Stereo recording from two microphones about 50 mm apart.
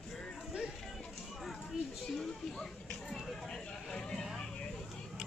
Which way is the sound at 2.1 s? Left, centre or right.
Centre.